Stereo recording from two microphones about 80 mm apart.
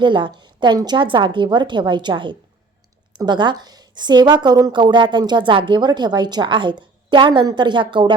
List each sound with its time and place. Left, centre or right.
0.0 s a woman's voice: right
4.7 s a woman's voice: right
7.5 s a woman's voice: right